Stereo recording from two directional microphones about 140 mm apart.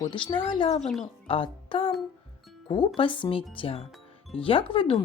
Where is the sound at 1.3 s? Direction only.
40° left (ahead or behind).